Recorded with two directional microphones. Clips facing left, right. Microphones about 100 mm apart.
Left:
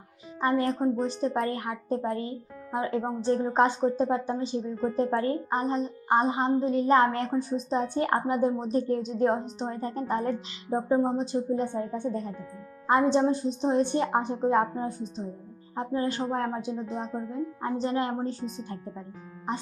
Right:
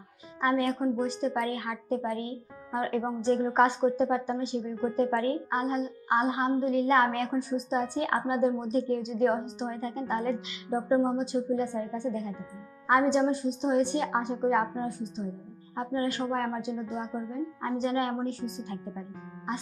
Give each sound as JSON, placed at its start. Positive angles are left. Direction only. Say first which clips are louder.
{"t": 0.3, "sound": "a woman's voice", "louder": "left 1 dB", "side_deg": 30}
{"t": 2.7, "sound": "a woman's voice", "louder": "left 1 dB", "side_deg": 20}